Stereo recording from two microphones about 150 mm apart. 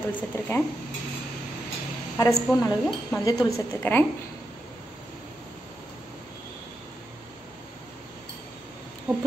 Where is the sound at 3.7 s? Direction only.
15° left (ahead or behind).